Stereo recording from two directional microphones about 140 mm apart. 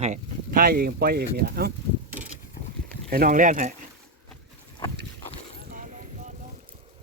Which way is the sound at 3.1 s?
80° right.